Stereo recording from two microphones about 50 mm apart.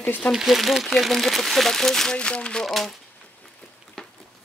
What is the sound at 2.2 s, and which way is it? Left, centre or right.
Speech, left.